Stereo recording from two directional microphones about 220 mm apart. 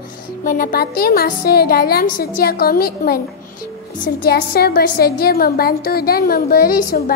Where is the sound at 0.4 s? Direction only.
40° left (ahead or behind).